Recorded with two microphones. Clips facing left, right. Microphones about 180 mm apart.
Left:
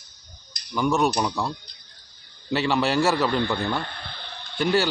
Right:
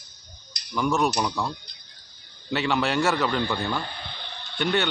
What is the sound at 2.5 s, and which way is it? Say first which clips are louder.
Speech: left 2 dB; centre (ahead or behind).